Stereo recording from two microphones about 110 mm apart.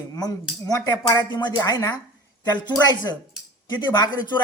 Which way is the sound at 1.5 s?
30° left (ahead or behind).